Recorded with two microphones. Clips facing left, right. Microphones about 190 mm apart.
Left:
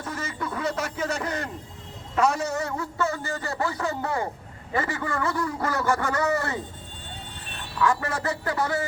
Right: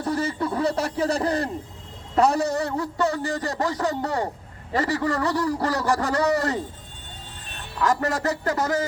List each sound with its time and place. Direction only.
0.0 s a man's voice: 35° right (ahead or behind)
7.8 s a man's voice: 40° right (ahead or behind)